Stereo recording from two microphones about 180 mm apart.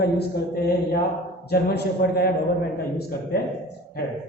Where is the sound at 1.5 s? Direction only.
60° left (ahead or behind).